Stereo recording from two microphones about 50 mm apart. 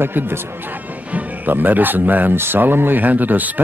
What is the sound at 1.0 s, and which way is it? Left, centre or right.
Speech, right.